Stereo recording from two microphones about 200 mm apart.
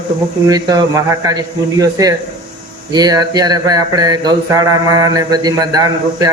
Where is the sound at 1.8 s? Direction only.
15° right (ahead or behind).